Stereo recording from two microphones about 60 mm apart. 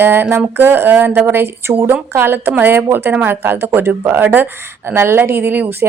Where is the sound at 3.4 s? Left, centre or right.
Right.